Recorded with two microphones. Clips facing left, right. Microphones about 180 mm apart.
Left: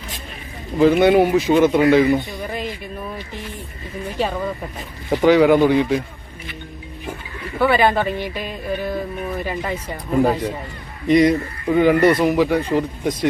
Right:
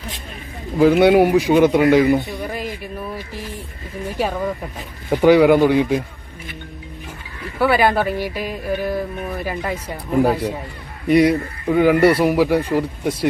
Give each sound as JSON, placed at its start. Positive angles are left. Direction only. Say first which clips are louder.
{"t": 0.8, "sound": "speech", "louder": "right 1 dB", "side_deg": -10}
{"t": 5.0, "sound": "speech", "louder": "right 1 dB", "side_deg": -10}
{"t": 7.6, "sound": "speech", "louder": "even", "side_deg": -10}